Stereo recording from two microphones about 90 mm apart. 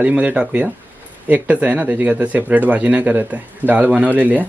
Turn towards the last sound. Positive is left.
turn(degrees=-20)  # may be behind; listen again after turning